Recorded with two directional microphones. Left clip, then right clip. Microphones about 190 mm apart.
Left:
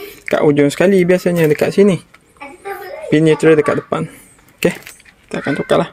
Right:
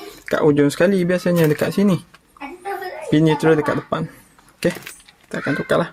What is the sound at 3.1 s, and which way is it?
Speech, 20° left (ahead or behind).